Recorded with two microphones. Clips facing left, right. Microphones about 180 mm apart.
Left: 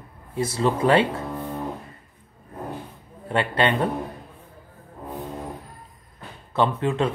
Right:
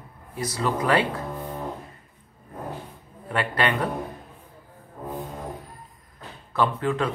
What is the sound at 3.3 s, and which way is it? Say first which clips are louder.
Speech: left 3 dB; 25° left (ahead or behind).